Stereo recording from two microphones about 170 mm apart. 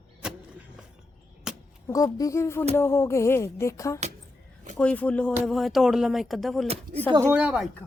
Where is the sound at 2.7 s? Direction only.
15° left (ahead or behind).